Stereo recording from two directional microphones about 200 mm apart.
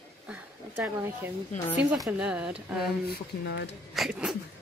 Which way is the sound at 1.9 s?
5° right (ahead or behind).